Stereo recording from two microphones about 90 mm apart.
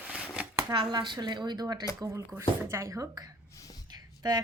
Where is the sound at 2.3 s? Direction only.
30° right (ahead or behind).